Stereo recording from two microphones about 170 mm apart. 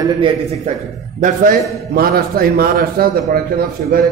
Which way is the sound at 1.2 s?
55° right (ahead or behind).